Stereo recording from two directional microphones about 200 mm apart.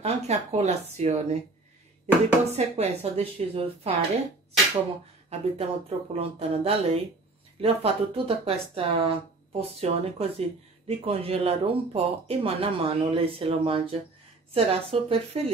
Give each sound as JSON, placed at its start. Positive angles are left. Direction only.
{"t": 0.0, "sound": "speech", "side_deg": -30}
{"t": 2.5, "sound": "speech", "side_deg": -35}
{"t": 5.3, "sound": "speech", "side_deg": -30}